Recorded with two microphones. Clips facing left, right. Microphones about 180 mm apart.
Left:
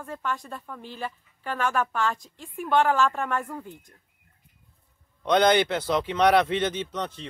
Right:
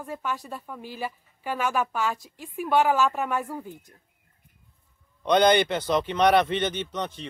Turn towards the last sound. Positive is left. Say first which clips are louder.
# even
turn(degrees=-5)  # may be behind; listen again after turning